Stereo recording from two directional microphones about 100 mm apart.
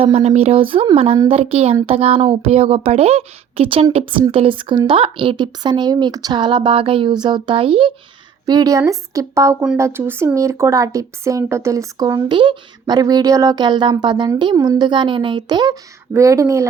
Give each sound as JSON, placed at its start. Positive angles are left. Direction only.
{"t": 0.0, "sound": "speech", "side_deg": -90}
{"t": 0.9, "sound": "speech", "side_deg": -80}
{"t": 4.3, "sound": "a woman's voice", "side_deg": -65}
{"t": 8.4, "sound": "a woman's voice", "side_deg": -40}
{"t": 12.3, "sound": "a woman's voice", "side_deg": -50}
{"t": 14.5, "sound": "a woman's voice", "side_deg": -40}
{"t": 16.1, "sound": "a woman's voice", "side_deg": -30}